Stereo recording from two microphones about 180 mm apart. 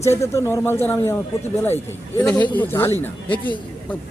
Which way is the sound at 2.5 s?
10° left (ahead or behind).